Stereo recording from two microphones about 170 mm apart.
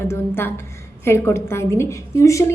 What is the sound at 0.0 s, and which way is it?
A woman's voice, 15° left (ahead or behind).